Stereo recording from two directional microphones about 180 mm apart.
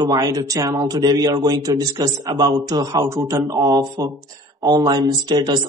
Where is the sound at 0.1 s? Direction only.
20° right (ahead or behind).